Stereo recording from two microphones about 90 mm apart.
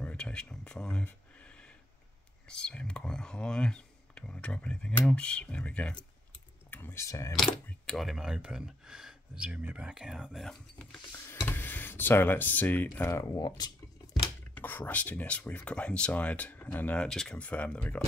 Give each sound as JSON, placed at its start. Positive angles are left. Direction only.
{"t": 0.0, "sound": "speech", "side_deg": 10}
{"t": 1.0, "sound": "a sound", "side_deg": 10}
{"t": 2.4, "sound": "speech", "side_deg": 10}
{"t": 6.7, "sound": "speech", "side_deg": 25}
{"t": 7.1, "sound": "speech", "side_deg": 35}
{"t": 7.3, "sound": "speech", "side_deg": 5}
{"t": 10.5, "sound": "speech", "side_deg": 5}
{"t": 11.1, "sound": "speech", "side_deg": 25}
{"t": 13.1, "sound": "speech", "side_deg": 45}
{"t": 14.5, "sound": "speech", "side_deg": 20}
{"t": 17.0, "sound": "speech", "side_deg": 5}